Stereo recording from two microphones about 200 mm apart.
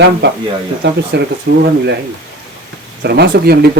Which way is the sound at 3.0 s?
55° right (ahead or behind).